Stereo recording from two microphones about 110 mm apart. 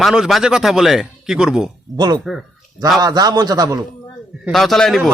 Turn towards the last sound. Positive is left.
turn(degrees=0)  # may be behind; listen again after turning